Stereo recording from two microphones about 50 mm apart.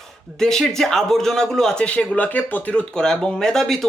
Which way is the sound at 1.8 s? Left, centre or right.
Left.